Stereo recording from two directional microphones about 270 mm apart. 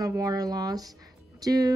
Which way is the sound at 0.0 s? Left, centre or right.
Centre.